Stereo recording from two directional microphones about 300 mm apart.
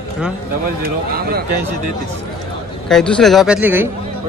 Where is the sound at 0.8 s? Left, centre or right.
Right.